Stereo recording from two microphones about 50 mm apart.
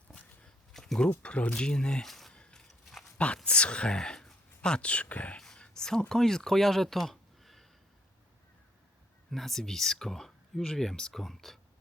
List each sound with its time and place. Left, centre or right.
0.7 s a sound: centre
1.2 s speech: left
2.0 s a sound: centre
2.3 s biting: centre
3.2 s speech: left
5.5 s speech: centre
9.3 s speech: centre